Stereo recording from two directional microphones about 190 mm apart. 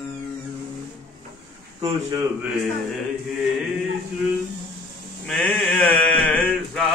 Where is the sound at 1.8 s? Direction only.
20° right (ahead or behind).